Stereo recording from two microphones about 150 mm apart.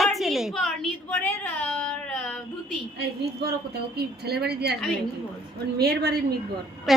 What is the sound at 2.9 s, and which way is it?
A woman's voice, 90° right.